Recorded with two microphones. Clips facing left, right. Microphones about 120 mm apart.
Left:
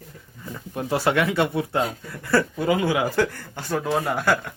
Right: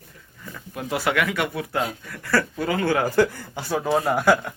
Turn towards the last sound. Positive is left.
turn(degrees=-5)  # may be behind; listen again after turning